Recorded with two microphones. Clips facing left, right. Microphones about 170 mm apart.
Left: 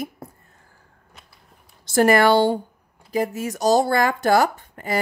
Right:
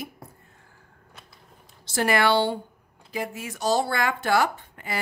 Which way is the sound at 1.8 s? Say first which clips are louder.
Left 7 dB; 45° left (ahead or behind).